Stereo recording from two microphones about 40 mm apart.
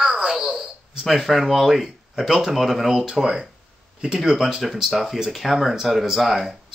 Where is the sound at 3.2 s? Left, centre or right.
Right.